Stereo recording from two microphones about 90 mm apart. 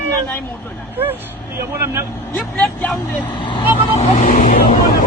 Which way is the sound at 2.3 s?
15° left (ahead or behind).